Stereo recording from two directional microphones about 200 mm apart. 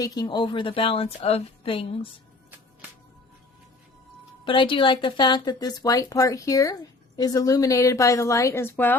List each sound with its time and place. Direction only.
0.0 s speech: 20° left (ahead or behind)
4.4 s a woman's voice: 25° left (ahead or behind); by 9.0 s 10° left (ahead or behind)